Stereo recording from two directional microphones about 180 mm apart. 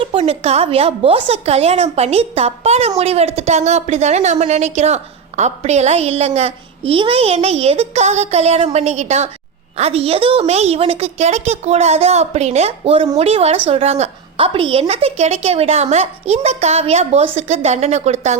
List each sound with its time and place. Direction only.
0.0 s a child's voice: 30° right (ahead or behind)